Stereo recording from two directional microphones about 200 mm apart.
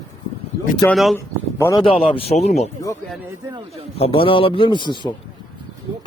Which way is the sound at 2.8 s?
15° left (ahead or behind).